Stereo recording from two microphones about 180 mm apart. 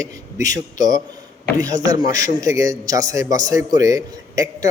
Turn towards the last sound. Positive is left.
turn(degrees=-20)  # may be behind; listen again after turning